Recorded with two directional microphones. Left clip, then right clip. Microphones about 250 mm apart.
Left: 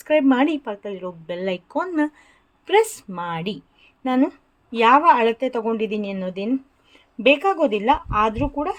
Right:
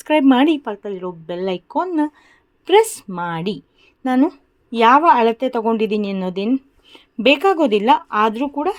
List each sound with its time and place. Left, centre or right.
0.0 s a woman's voice: right